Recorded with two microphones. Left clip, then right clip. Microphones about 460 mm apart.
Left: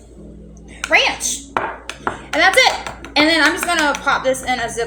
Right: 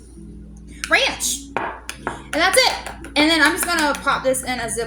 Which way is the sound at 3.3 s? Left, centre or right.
Right.